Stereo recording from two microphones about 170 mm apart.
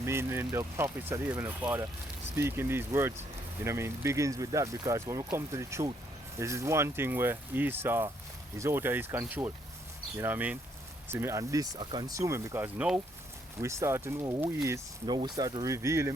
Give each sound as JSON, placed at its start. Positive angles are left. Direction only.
{"t": 0.0, "sound": "speech", "side_deg": -15}